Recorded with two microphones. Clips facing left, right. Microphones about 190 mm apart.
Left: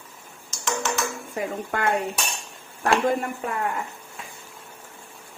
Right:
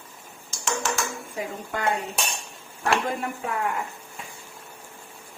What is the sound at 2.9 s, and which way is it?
Speech, 45° left (ahead or behind).